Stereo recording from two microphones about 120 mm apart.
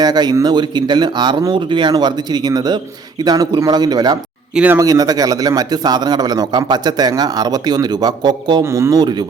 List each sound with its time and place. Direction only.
0.0 s a man's voice: 35° right (ahead or behind)
4.5 s speech: 10° right (ahead or behind)
4.8 s a man's voice: 30° right (ahead or behind)